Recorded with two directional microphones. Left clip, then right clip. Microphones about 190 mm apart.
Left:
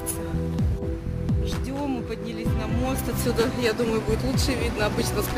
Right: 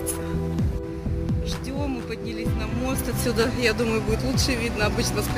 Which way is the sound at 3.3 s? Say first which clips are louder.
Right 1 dB; centre (ahead or behind).